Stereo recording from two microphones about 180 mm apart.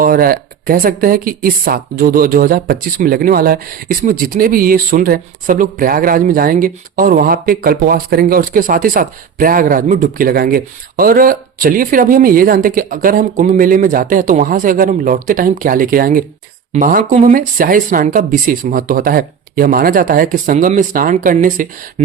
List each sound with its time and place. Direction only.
0.0 s speech: 55° right (ahead or behind)